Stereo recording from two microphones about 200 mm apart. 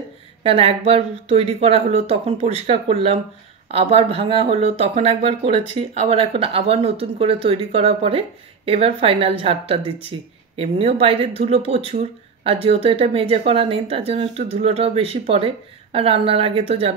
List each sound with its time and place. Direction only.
0.4 s speech: 30° right (ahead or behind)